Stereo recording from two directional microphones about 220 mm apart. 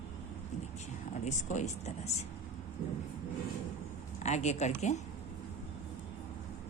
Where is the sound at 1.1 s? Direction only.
35° left (ahead or behind).